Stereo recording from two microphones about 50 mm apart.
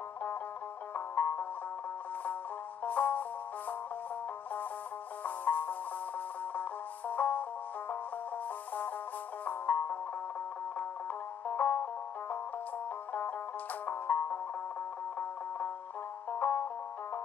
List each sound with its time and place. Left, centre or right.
0.9 s music: left
2.8 s music: left
5.2 s music: left
9.4 s music: left
11.4 s music: left
13.8 s music: left
16.3 s music: left